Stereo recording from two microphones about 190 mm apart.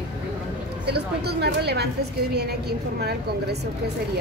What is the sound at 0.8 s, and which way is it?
Speech, 60° right (ahead or behind).